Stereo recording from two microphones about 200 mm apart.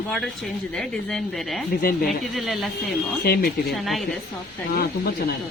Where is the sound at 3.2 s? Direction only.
50° left (ahead or behind).